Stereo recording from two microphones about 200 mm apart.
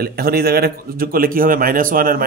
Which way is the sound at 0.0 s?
50° right (ahead or behind).